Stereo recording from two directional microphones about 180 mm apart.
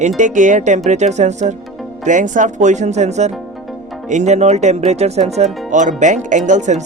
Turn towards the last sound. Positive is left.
turn(degrees=-40)  # may be behind; listen again after turning